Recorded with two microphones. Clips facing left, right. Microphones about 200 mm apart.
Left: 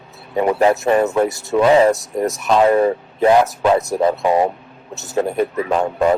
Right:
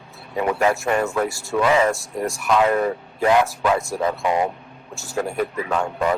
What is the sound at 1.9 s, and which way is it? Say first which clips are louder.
Speech: left 5 dB; 20° left (ahead or behind).